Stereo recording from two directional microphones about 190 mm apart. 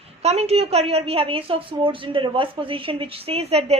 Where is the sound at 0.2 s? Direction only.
35° right (ahead or behind).